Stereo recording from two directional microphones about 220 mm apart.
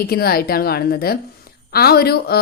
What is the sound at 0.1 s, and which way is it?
A woman's voice, 45° left (ahead or behind).